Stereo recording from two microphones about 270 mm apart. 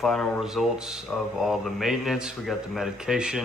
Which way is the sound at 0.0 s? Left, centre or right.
Centre.